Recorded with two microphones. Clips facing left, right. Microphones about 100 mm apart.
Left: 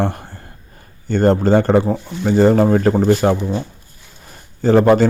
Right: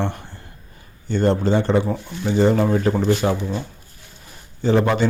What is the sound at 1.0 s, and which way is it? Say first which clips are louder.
A man's voice: left 5 dB; 45° left (ahead or behind).